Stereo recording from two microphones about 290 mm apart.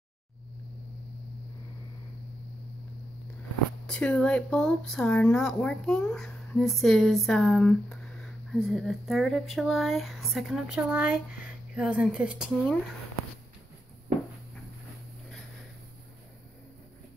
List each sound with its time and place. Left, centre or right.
3.8 s speech: centre